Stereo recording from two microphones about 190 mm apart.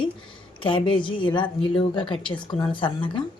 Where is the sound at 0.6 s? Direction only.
25° left (ahead or behind).